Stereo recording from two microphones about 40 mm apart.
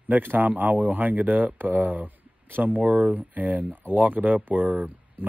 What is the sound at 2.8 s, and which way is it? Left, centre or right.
Speech, right.